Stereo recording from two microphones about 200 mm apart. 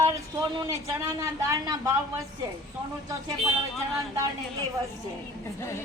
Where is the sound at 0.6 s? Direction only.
15° right (ahead or behind).